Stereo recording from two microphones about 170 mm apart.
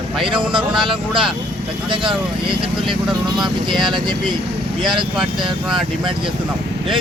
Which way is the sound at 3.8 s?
25° right (ahead or behind).